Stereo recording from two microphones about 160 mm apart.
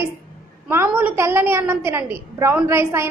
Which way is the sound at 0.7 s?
10° right (ahead or behind).